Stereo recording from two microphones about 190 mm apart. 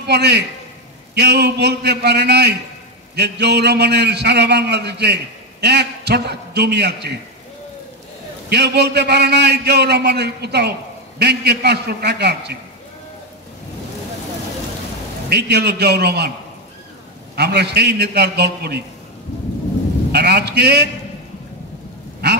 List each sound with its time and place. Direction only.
0.0 s a man's voice: 60° right (ahead or behind)
8.5 s a man's voice: 60° right (ahead or behind)
15.2 s a man's voice: 60° right (ahead or behind)
17.4 s a man's voice: 60° right (ahead or behind)
20.1 s a man's voice: 60° right (ahead or behind)